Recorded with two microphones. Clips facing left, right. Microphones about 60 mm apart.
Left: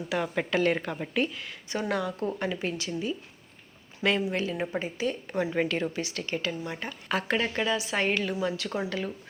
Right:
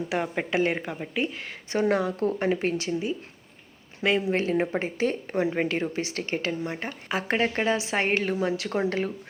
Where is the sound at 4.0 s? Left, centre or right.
Centre.